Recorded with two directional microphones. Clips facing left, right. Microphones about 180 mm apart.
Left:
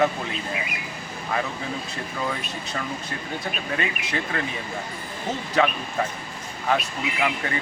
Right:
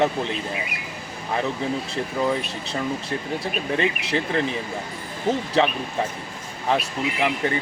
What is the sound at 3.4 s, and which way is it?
Speech, 30° right (ahead or behind).